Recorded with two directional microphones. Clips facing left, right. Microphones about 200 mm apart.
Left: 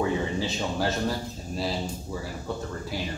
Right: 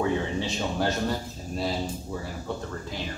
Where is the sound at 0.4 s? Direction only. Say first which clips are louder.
Even; centre (ahead or behind).